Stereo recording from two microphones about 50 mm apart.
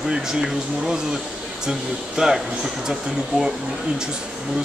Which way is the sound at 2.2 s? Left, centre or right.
Centre.